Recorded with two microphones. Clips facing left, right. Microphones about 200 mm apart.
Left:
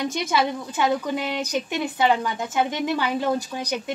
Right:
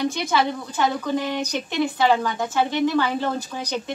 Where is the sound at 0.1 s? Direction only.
15° left (ahead or behind).